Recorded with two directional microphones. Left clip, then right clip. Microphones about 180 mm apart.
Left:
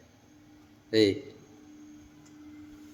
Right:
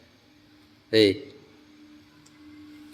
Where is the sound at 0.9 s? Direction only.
30° right (ahead or behind).